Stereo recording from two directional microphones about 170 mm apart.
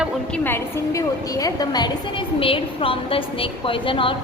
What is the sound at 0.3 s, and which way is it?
A woman's voice, 10° left (ahead or behind).